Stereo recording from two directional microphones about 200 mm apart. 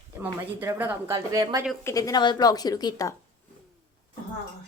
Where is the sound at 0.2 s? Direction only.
10° right (ahead or behind).